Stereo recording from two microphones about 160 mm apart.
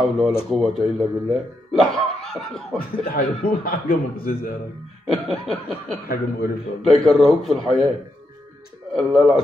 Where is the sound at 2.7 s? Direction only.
65° left (ahead or behind).